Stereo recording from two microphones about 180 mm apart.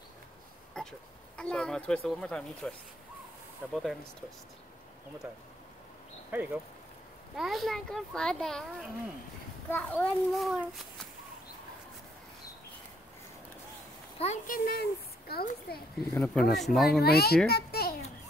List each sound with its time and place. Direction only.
0.8 s a sound: 5° left (ahead or behind)
1.3 s a woman's voice: 5° left (ahead or behind)
6.3 s a woman's voice: 10° right (ahead or behind)
9.7 s a child's voice: 10° left (ahead or behind)
14.2 s speech: 40° left (ahead or behind)
14.7 s a child's voice: 60° left (ahead or behind)
16.1 s a woman's voice: 5° left (ahead or behind)
17.0 s a child's voice: 60° left (ahead or behind)
17.5 s a sound: 60° left (ahead or behind)